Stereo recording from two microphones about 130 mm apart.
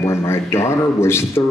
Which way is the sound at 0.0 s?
20° left (ahead or behind).